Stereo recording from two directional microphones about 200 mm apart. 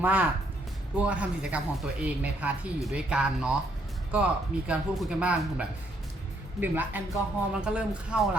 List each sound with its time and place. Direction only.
0.0 s speech: 10° right (ahead or behind)